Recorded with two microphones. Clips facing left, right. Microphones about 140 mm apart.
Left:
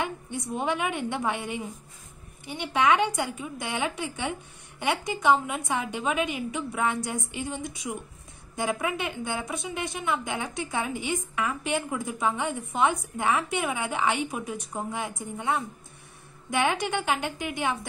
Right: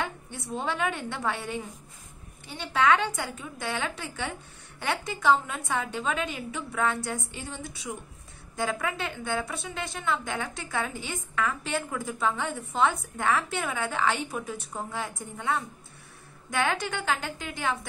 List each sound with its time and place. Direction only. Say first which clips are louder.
0.0 s a woman's voice: left 3 dB; 15° left (ahead or behind)